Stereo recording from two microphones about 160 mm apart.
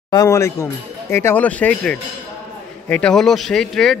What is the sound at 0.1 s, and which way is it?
A man's voice, 20° left (ahead or behind).